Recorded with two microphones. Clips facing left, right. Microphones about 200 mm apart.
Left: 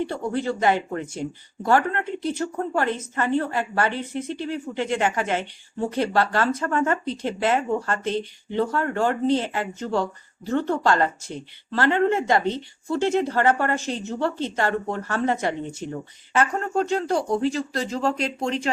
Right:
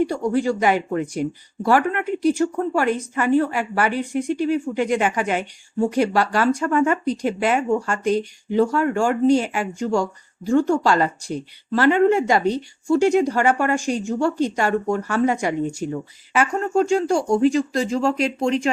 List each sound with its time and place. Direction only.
0.0 s speech: 15° right (ahead or behind)
18.2 s speech: 30° left (ahead or behind)